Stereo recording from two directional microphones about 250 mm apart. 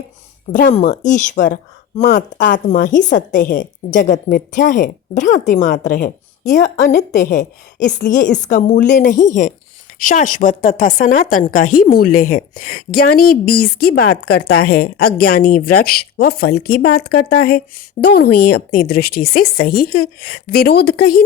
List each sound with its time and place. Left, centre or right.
0.5 s a woman's voice: left